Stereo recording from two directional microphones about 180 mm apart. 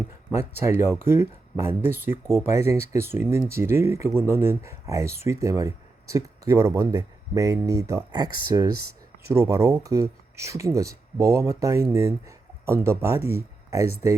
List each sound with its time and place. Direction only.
0.3 s speech: 15° right (ahead or behind)